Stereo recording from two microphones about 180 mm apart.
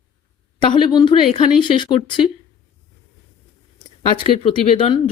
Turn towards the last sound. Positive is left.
turn(degrees=30)  # may be behind; listen again after turning